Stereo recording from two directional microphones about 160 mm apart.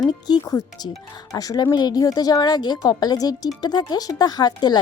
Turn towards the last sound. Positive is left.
turn(degrees=25)  # may be behind; listen again after turning